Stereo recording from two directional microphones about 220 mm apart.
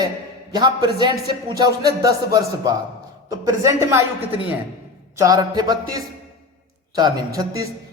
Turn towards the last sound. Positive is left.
turn(degrees=-15)  # may be behind; listen again after turning